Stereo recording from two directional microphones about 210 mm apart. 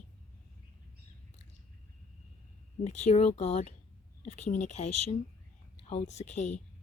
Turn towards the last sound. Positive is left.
turn(degrees=35)  # may be behind; listen again after turning